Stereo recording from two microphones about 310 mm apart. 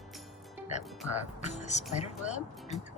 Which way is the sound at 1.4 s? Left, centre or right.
Left.